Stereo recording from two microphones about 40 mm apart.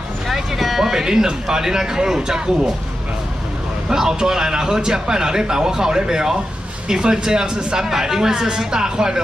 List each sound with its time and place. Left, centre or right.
0.3 s speech: centre
3.9 s a man's voice: centre